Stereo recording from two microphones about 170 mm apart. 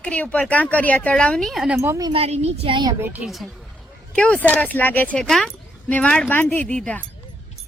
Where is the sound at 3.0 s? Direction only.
10° right (ahead or behind).